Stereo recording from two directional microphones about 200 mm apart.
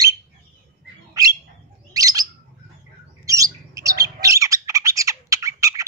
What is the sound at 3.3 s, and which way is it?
Bird, 15° right (ahead or behind).